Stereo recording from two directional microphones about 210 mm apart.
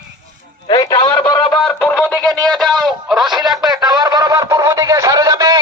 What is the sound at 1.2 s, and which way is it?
Music, 20° left (ahead or behind).